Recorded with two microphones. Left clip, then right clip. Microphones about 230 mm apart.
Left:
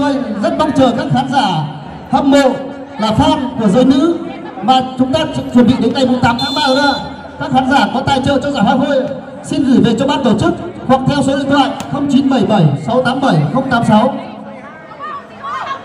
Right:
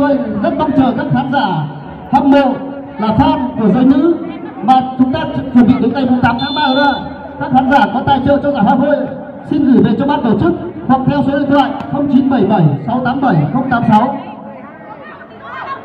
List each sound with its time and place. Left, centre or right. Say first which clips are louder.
0.0 s a man's voice: right 2 dB; left